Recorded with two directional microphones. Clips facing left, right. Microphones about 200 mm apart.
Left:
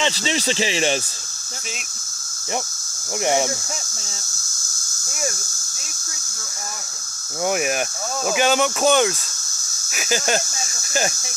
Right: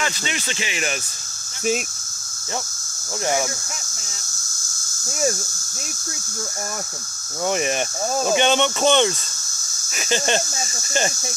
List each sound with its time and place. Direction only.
0.0 s speech: 30° left (ahead or behind)
7.4 s speech: 5° left (ahead or behind)